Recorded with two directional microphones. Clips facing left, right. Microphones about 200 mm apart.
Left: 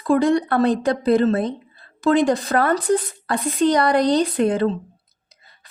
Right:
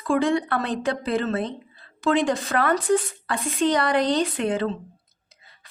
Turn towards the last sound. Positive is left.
turn(degrees=40)  # may be behind; listen again after turning